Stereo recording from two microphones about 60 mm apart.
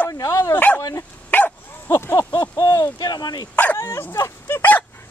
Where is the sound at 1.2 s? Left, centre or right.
Left.